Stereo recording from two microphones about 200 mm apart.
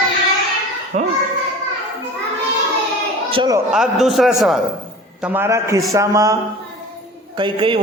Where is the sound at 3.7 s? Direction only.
Centre (ahead or behind).